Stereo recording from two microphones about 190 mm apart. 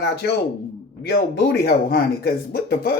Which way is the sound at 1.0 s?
60° left (ahead or behind).